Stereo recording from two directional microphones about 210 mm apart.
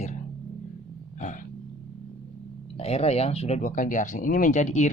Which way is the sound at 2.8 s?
30° left (ahead or behind).